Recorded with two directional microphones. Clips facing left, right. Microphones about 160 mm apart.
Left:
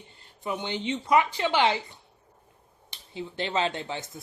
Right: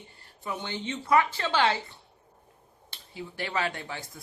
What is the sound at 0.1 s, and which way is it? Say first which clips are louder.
A woman's voice: left 4 dB; 20° left (ahead or behind).